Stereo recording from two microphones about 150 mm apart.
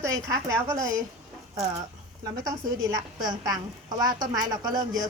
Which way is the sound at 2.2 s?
25° right (ahead or behind).